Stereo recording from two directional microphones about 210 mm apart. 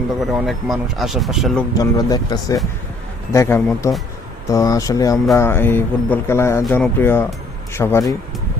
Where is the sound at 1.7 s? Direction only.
15° left (ahead or behind).